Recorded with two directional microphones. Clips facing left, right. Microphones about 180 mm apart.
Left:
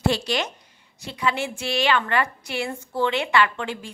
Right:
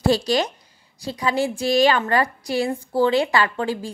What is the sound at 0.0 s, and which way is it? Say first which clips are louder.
A woman's voice: right 4 dB; 40° right (ahead or behind).